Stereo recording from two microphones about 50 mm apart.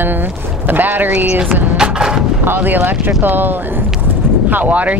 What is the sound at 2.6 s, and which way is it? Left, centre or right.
Speech, right.